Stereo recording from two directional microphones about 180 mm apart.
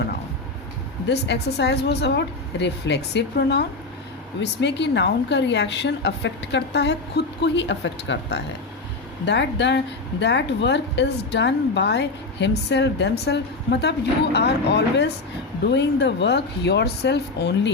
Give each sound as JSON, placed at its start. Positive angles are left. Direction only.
{"t": 1.0, "sound": "speech", "side_deg": 70}
{"t": 9.2, "sound": "speech", "side_deg": 75}